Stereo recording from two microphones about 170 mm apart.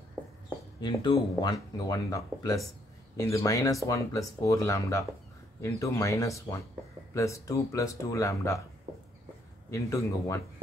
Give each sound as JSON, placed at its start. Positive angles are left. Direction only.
{"t": 0.7, "sound": "speech", "side_deg": 25}
{"t": 9.7, "sound": "speech", "side_deg": 20}